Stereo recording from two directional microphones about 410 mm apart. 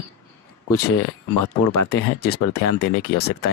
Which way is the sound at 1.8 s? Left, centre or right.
Left.